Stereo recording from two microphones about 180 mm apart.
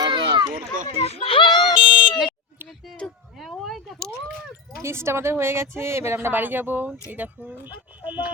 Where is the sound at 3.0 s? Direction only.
Centre (ahead or behind).